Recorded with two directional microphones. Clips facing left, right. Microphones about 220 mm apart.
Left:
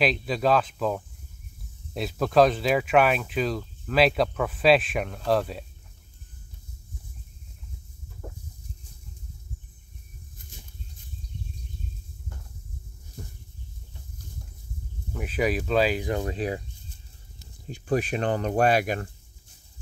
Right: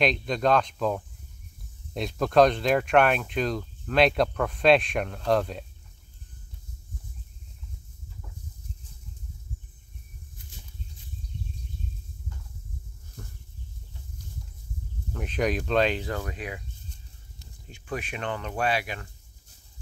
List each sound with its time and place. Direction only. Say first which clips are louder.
0.0 s speech: even; 5° left (ahead or behind)
8.2 s a sound: left 11 dB; 60° left (ahead or behind)
15.1 s speech: left 1 dB; 5° left (ahead or behind)
16.1 s speech: left 5 dB; 20° left (ahead or behind)
16.3 s speech: left 8 dB; 35° left (ahead or behind)
17.6 s speech: left 9 dB; 35° left (ahead or behind)